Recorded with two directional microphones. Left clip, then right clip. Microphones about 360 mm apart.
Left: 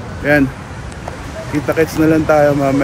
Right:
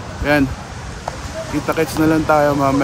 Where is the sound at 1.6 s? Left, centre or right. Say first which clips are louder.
Left 3 dB; centre.